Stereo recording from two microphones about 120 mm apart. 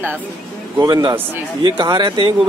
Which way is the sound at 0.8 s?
30° right (ahead or behind).